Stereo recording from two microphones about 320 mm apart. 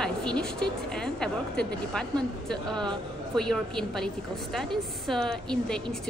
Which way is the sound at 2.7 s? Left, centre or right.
Centre.